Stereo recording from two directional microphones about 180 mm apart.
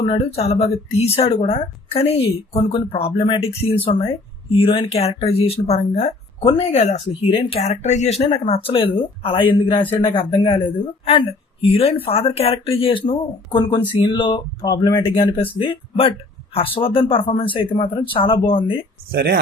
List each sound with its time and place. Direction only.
0.0 s speech: 35° left (ahead or behind)